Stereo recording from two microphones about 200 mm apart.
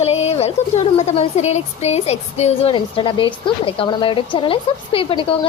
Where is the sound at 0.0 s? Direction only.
30° left (ahead or behind).